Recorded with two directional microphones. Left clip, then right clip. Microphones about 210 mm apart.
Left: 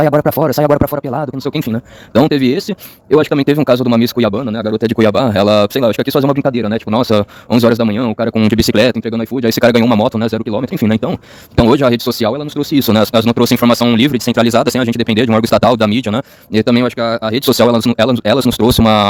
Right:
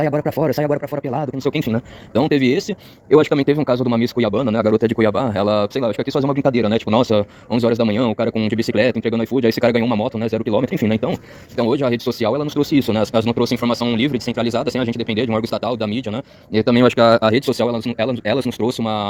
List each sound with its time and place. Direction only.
0.0 s speech: 30° left (ahead or behind)
4.9 s speech: 35° left (ahead or behind)
8.4 s speech: 40° left (ahead or behind)
11.5 s speech: 50° left (ahead or behind)
16.8 s speech: centre (ahead or behind)
17.4 s speech: 50° left (ahead or behind)
18.7 s speech: 50° left (ahead or behind)